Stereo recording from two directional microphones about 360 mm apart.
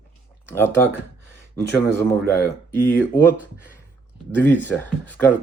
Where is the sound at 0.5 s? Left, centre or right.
Centre.